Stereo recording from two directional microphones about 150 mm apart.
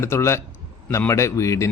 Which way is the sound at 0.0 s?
15° left (ahead or behind).